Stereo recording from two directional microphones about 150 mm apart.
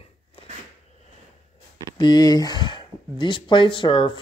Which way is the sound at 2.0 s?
25° left (ahead or behind).